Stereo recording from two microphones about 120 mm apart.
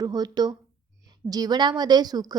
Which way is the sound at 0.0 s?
35° right (ahead or behind).